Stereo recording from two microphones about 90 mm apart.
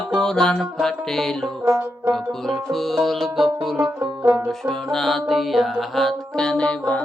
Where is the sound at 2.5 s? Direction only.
Centre (ahead or behind).